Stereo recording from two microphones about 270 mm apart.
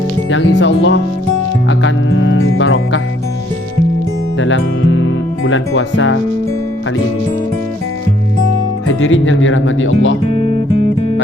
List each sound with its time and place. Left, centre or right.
0.3 s speech: left
4.4 s speech: left
8.9 s speech: left